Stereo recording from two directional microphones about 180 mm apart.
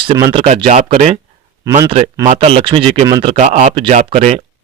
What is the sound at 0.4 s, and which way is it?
Speech, 35° right (ahead or behind).